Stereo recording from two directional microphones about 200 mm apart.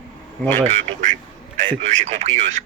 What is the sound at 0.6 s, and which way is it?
Speech, 35° right (ahead or behind).